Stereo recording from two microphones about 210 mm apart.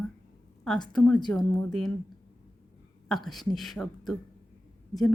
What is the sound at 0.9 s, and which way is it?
Speech, 5° left (ahead or behind).